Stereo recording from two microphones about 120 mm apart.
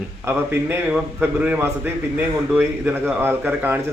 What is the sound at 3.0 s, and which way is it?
Speech, 15° right (ahead or behind).